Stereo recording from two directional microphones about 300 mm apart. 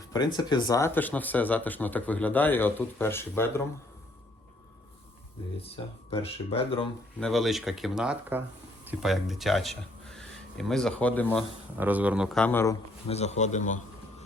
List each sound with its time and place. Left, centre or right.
0.1 s speech: centre
5.5 s speech: centre
7.2 s speech: centre
11.8 s a man's voice: centre
13.1 s speech: left